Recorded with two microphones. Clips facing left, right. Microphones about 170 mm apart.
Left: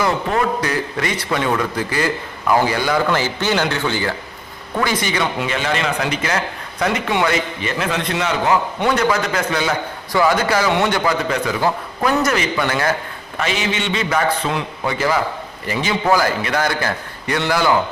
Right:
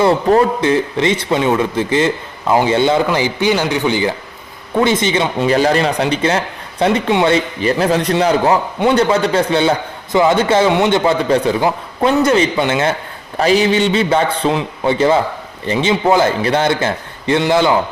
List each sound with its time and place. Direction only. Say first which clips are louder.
0.0 s a man's voice: right 7 dB; 35° right (ahead or behind)
5.5 s a man's voice: right 8 dB; 35° right (ahead or behind); by 17.7 s 20° right (ahead or behind)